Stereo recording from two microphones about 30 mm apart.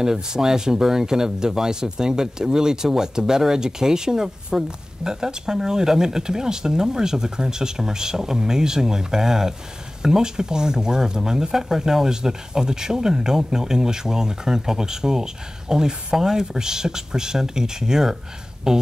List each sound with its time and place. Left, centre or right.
0.0 s speech: centre